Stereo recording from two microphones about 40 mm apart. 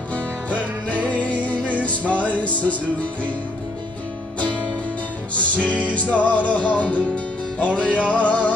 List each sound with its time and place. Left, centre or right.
0.1 s music: left
5.3 s music: left